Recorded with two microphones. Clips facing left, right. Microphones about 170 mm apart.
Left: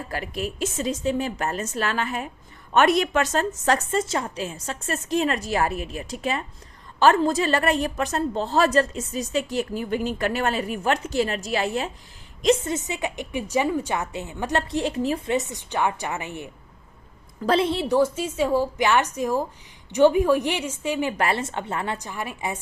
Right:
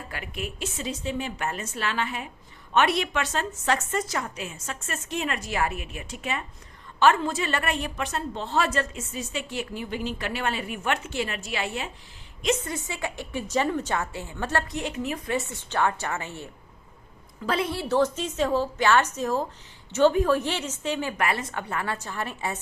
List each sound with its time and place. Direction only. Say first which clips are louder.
0.1 s a woman's voice: left 6 dB; 35° left (ahead or behind)
3.9 s a woman's voice: left 4 dB; 25° left (ahead or behind)
12.6 s a woman's voice: left 5 dB; 20° left (ahead or behind)
14.7 s a woman's voice: left 6 dB; 30° left (ahead or behind)
15.3 s a woman's voice: left 4 dB; 15° left (ahead or behind)
17.4 s a woman's voice: left 6 dB; 30° left (ahead or behind)
17.8 s a woman's voice: left 3 dB; 10° left (ahead or behind)
21.1 s a woman's voice: left 3 dB; 30° left (ahead or behind); by 22.5 s 15° left (ahead or behind)